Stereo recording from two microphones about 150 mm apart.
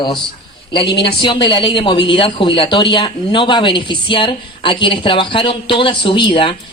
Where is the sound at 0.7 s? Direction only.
35° left (ahead or behind).